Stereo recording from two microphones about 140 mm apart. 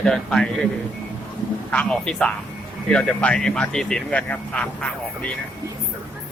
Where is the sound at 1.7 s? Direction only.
10° left (ahead or behind).